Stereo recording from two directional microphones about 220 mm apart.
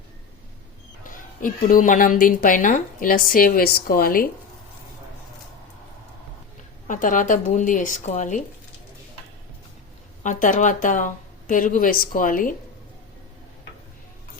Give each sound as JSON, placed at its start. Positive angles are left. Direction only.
{"t": 1.0, "sound": "a woman's voice", "side_deg": 35}
{"t": 6.8, "sound": "a woman's voice", "side_deg": 35}
{"t": 10.2, "sound": "a woman's voice", "side_deg": 35}